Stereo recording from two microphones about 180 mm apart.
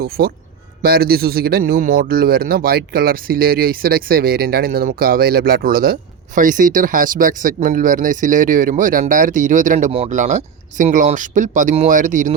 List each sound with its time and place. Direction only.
0.0 s a man's voice: 55° right (ahead or behind)